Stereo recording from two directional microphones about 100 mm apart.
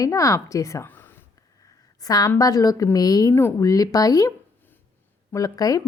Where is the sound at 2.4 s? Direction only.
35° left (ahead or behind).